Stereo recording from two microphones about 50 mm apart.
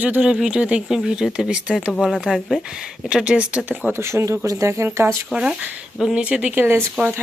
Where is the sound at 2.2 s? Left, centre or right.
Centre.